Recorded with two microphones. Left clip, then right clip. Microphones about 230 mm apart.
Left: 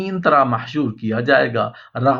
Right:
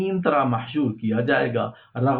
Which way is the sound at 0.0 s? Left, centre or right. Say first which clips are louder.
Left 6 dB; left.